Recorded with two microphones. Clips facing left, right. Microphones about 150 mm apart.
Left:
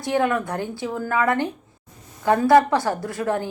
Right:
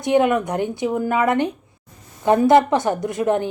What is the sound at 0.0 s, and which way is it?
A woman's voice, 20° right (ahead or behind).